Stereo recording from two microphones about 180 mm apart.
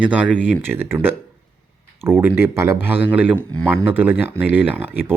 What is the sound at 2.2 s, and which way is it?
Speech, 15° right (ahead or behind).